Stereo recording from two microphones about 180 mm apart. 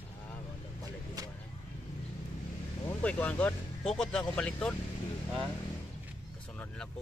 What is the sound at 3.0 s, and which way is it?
A man's voice, 5° left (ahead or behind).